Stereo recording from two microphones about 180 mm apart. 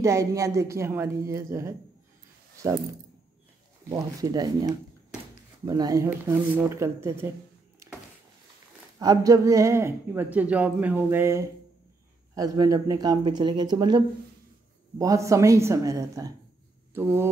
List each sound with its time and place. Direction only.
0.0 s speech: 15° right (ahead or behind)
9.0 s speech: 20° right (ahead or behind)